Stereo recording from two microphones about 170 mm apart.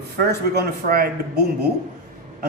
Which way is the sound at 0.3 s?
70° right (ahead or behind).